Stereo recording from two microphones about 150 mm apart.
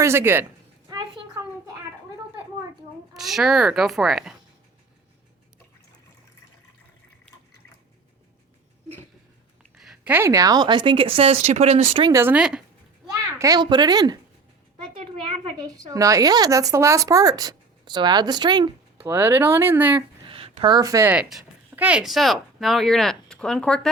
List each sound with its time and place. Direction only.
0.0 s speech: 15° right (ahead or behind)
3.2 s a woman's voice: centre (ahead or behind)
9.8 s speech: 5° right (ahead or behind); by 12.0 s 45° right (ahead or behind)
12.0 s speech: 15° right (ahead or behind)
13.4 s speech: 25° right (ahead or behind)
15.4 s speech: 25° right (ahead or behind)
18.9 s speech: 15° right (ahead or behind)
20.2 s a sound: 40° right (ahead or behind)
20.7 s speech: 25° right (ahead or behind)
21.1 s speech: 5° right (ahead or behind)